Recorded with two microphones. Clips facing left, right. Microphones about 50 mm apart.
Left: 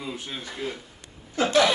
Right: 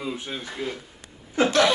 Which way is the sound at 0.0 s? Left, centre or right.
Centre.